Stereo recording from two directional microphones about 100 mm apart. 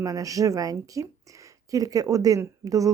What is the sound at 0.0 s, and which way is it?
Speech, 35° right (ahead or behind).